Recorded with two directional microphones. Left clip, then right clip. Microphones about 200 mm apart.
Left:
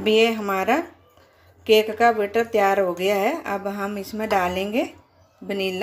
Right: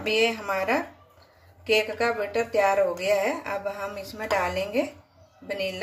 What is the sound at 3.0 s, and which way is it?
A woman's voice, 40° left (ahead or behind).